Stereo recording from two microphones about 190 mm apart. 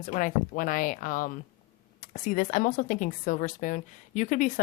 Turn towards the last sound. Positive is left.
turn(degrees=40)  # may be behind; listen again after turning